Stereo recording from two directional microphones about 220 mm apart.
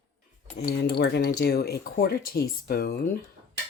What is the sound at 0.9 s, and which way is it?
Speech, 50° left (ahead or behind).